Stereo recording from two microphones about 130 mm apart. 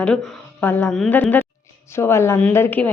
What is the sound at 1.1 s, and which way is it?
Speech, 15° left (ahead or behind).